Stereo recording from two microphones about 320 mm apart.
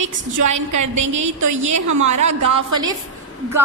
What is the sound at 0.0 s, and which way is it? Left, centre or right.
A woman's voice, right.